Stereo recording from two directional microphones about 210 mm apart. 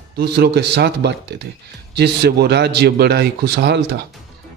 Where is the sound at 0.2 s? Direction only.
50° right (ahead or behind).